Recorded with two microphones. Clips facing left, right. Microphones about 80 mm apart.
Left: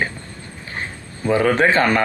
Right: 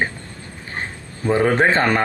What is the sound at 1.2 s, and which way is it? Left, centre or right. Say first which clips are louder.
Speech: even; right.